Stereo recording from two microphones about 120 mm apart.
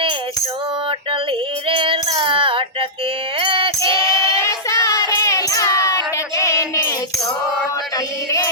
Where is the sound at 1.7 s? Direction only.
50° right (ahead or behind).